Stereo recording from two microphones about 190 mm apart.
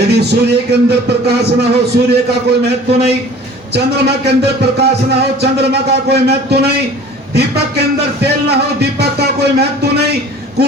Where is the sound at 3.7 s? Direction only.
60° right (ahead or behind).